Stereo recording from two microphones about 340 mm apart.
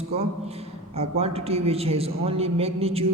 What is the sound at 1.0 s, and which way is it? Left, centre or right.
A man's voice, centre.